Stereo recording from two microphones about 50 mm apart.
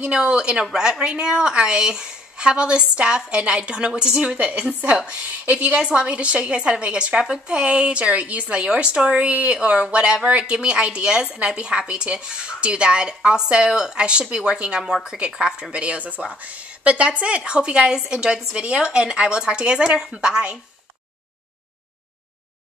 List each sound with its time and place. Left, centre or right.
0.0 s a woman's voice: centre